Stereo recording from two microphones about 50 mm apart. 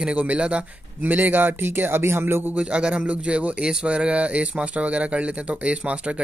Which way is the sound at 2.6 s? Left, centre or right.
Right.